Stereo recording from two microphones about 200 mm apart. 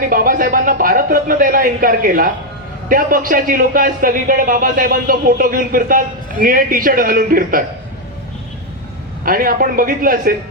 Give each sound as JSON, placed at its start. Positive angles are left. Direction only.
{"t": 0.1, "sound": "speech", "side_deg": -45}
{"t": 9.2, "sound": "speech", "side_deg": -45}